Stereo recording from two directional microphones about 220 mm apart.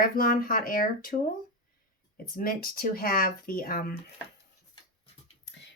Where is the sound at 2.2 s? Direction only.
40° left (ahead or behind).